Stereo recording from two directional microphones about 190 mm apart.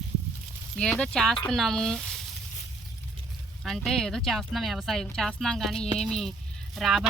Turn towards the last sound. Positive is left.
turn(degrees=0)  # may be behind; listen again after turning